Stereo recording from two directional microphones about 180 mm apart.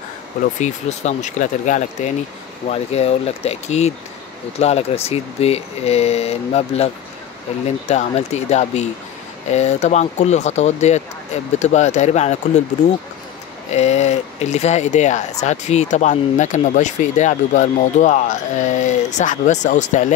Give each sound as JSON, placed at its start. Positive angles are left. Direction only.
{"t": 0.6, "sound": "speech", "side_deg": 40}
{"t": 7.9, "sound": "speech", "side_deg": 40}
{"t": 13.7, "sound": "speech", "side_deg": 40}